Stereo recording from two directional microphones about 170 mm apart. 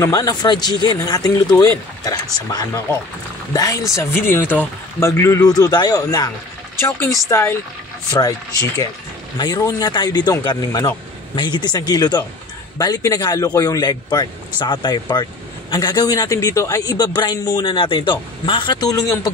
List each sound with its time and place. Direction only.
0.0 s a man's voice: 20° left (ahead or behind)